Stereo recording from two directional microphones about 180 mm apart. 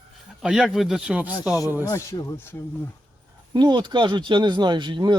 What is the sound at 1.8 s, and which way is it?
Speech, 20° left (ahead or behind).